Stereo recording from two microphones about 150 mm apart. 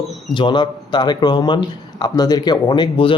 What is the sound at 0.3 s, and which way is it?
A man's voice, 30° left (ahead or behind).